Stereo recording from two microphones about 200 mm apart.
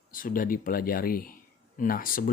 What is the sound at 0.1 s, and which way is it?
Speech, 45° left (ahead or behind).